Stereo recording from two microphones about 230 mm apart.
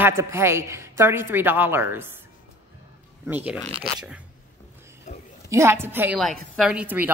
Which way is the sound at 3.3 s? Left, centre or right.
Centre.